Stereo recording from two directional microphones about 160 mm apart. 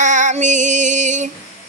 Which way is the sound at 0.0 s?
50° right (ahead or behind).